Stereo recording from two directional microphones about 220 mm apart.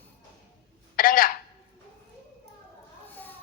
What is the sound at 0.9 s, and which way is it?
Telephone, 40° left (ahead or behind).